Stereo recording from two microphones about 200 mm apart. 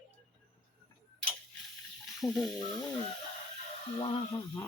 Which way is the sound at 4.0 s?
25° left (ahead or behind).